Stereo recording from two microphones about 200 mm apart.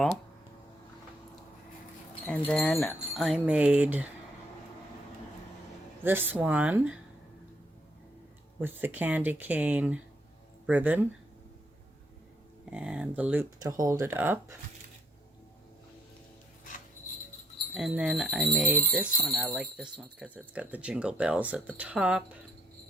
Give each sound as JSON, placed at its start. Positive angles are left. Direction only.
{"t": 2.5, "sound": "wind chime", "side_deg": 0}
{"t": 6.0, "sound": "speech", "side_deg": -10}
{"t": 8.6, "sound": "speech", "side_deg": -10}
{"t": 12.7, "sound": "wind chime", "side_deg": -5}
{"t": 13.6, "sound": "speech", "side_deg": -15}
{"t": 17.7, "sound": "wind chime", "side_deg": 0}
{"t": 20.5, "sound": "speech", "side_deg": -10}